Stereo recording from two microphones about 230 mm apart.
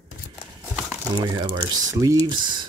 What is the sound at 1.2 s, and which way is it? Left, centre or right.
Speech, centre.